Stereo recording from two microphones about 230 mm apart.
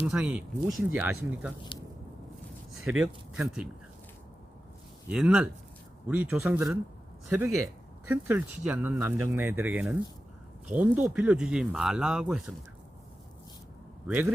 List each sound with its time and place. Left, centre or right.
0.0 s speech: centre
3.0 s speech: centre
5.0 s speech: centre
7.5 s a sound: right
8.1 s speech: centre
14.1 s speech: centre